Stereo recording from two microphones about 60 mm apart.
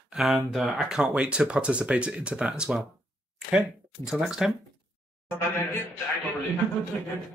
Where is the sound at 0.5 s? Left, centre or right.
Centre.